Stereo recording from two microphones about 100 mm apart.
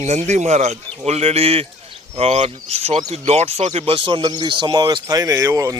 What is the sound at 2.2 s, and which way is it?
Speech, 90° right.